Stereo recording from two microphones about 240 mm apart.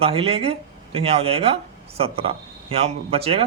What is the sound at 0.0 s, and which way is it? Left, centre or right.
Speech, right.